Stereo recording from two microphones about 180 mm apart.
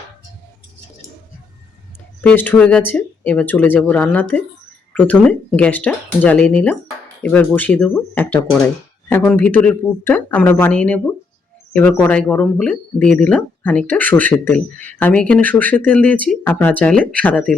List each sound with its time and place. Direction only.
2.2 s speech: 10° left (ahead or behind)